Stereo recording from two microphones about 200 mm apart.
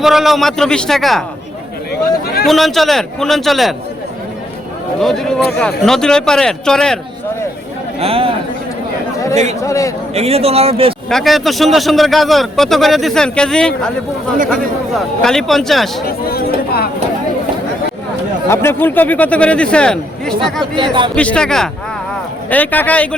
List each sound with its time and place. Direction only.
0.0 s a man's voice: centre (ahead or behind)
1.9 s speech: 50° left (ahead or behind)
2.5 s a man's voice: centre (ahead or behind)
4.9 s a man's voice: centre (ahead or behind)
7.9 s speech: 30° right (ahead or behind)
9.6 s speech: 15° left (ahead or behind)
10.2 s speech: 30° right (ahead or behind)
11.1 s a man's voice: centre (ahead or behind)
14.9 s a man's voice: centre (ahead or behind)
16.0 s a sound: 50° left (ahead or behind)
18.4 s speech: 10° left (ahead or behind)
20.7 s speech: 25° right (ahead or behind)
21.2 s a man's voice: 5° left (ahead or behind)